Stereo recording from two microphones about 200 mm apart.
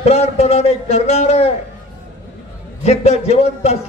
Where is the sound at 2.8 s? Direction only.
35° left (ahead or behind).